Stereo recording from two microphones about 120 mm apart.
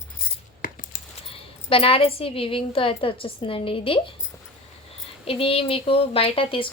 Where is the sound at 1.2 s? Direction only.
50° left (ahead or behind).